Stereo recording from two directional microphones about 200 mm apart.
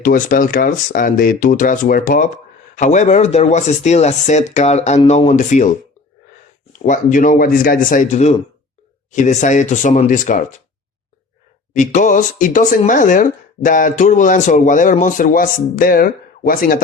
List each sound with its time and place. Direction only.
0.0 s speech: 45° left (ahead or behind)
6.8 s speech: 40° left (ahead or behind)
11.7 s speech: 40° left (ahead or behind)